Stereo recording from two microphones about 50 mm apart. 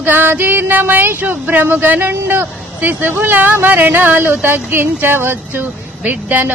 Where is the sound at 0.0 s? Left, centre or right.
Right.